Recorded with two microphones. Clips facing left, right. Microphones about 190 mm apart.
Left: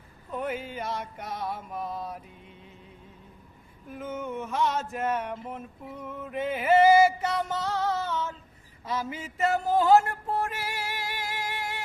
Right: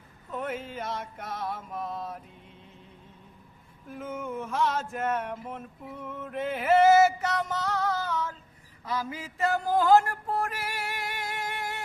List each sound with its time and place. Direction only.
0.3 s mantra: 5° left (ahead or behind)
4.0 s a sound: 5° right (ahead or behind)
4.4 s mantra: 5° left (ahead or behind)
5.5 s a sound: 5° left (ahead or behind)
7.2 s music: 25° left (ahead or behind)
8.8 s a man's voice: 25° left (ahead or behind)
10.4 s music: 25° left (ahead or behind)